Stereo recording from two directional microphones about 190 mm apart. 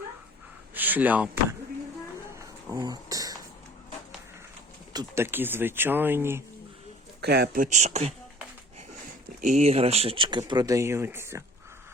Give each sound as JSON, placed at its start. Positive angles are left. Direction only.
{"t": 0.7, "sound": "speech", "side_deg": -10}
{"t": 2.6, "sound": "a sound", "side_deg": -20}
{"t": 4.9, "sound": "speech", "side_deg": -15}
{"t": 7.2, "sound": "speech", "side_deg": -55}
{"t": 9.5, "sound": "speech", "side_deg": -35}